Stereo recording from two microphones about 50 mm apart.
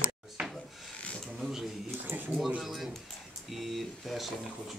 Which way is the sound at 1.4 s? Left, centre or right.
Centre.